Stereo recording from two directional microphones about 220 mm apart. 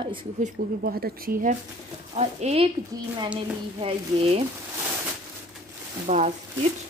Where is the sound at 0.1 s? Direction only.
25° right (ahead or behind).